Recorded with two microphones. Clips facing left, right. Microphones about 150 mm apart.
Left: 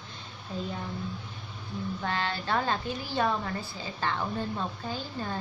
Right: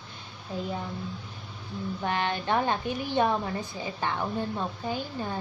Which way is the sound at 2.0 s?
15° right (ahead or behind).